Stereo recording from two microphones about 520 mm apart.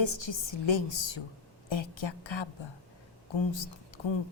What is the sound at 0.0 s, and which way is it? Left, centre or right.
A woman's voice, left.